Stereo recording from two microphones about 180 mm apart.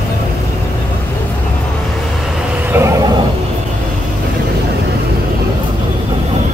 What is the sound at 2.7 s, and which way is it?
Vehicle, 15° right (ahead or behind).